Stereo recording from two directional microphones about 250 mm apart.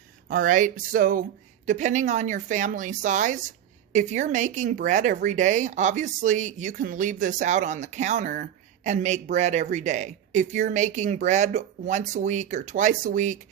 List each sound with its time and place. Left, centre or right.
0.3 s speech: right